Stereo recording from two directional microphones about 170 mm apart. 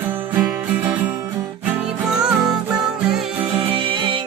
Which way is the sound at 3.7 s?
30° right (ahead or behind).